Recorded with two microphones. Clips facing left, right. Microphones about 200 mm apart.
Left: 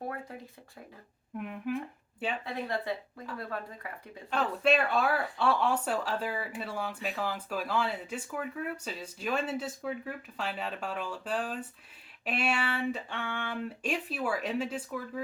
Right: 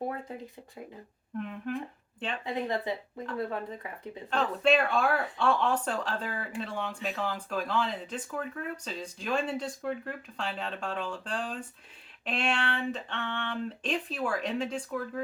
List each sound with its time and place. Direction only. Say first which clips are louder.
1.4 s speech: even; 10° left (ahead or behind)
2.4 s speech: right 3 dB; 20° right (ahead or behind)
4.3 s speech: right 1 dB; 5° left (ahead or behind)